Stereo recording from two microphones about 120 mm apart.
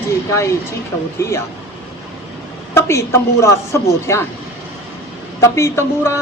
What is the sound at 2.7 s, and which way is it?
Speech, 20° left (ahead or behind).